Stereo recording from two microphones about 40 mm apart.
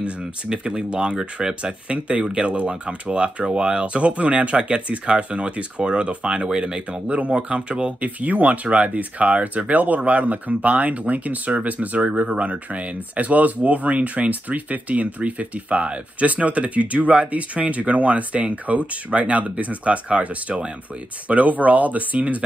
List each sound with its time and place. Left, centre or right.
0.2 s speech: centre; by 22.4 s right